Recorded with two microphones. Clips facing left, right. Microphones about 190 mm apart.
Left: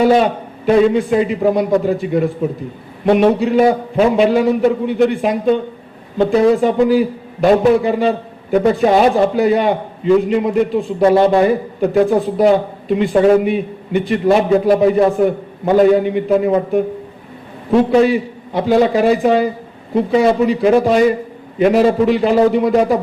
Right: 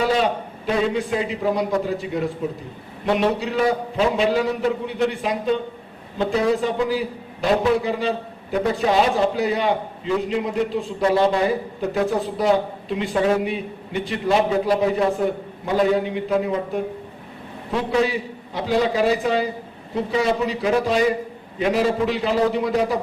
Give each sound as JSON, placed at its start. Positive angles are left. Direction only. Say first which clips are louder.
{"t": 0.0, "sound": "a man's voice", "louder": "left 8 dB", "side_deg": 55}